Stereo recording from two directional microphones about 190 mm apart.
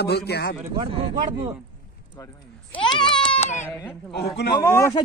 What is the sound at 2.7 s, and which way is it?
Speech, 25° left (ahead or behind).